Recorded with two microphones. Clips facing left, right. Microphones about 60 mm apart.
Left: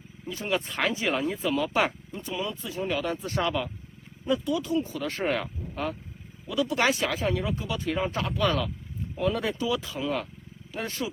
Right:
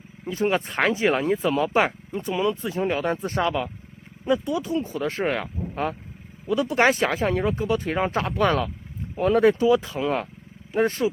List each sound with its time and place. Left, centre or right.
0.3 s speech: right
3.4 s speech: centre
4.3 s speech: right
5.2 s speech: centre
5.7 s speech: right